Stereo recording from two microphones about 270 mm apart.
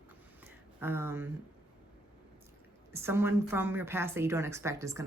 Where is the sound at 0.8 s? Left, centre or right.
Centre.